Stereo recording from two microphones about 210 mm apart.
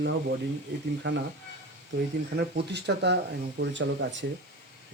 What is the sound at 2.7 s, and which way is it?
Speech, 55° right (ahead or behind).